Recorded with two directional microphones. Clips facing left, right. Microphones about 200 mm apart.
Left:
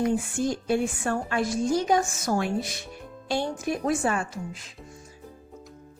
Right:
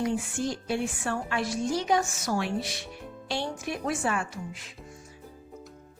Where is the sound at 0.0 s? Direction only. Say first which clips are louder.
Left 4 dB; 50° left (ahead or behind).